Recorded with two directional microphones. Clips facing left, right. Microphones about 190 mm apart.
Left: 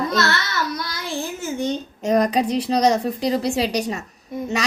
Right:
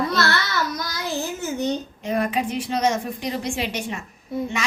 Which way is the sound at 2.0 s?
40° left (ahead or behind).